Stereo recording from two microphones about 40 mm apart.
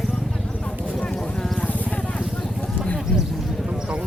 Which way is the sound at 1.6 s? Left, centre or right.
Left.